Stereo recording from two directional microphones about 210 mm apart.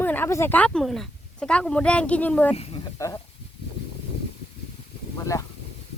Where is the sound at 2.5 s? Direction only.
30° left (ahead or behind).